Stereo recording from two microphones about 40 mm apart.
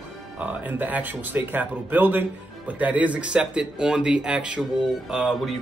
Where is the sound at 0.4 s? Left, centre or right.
Right.